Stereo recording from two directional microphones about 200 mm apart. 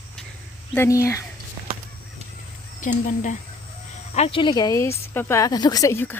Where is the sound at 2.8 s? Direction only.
40° left (ahead or behind).